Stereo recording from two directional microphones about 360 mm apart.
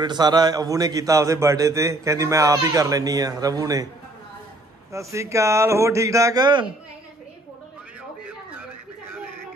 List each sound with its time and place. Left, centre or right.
0.0 s a man's voice: centre
4.9 s a man's voice: centre